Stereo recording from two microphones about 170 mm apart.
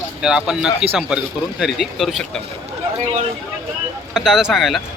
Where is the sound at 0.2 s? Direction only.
5° right (ahead or behind).